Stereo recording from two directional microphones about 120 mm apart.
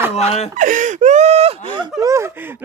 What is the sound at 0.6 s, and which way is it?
Speech, 90° right.